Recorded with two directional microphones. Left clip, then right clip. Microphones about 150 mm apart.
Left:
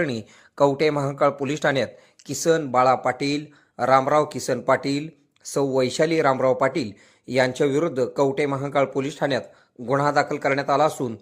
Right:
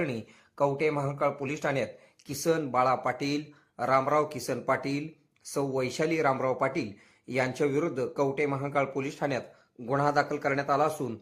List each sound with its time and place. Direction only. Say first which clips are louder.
0.0 s speech: left 7 dB; 30° left (ahead or behind)